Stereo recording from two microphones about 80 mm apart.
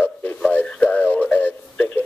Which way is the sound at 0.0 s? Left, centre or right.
Left.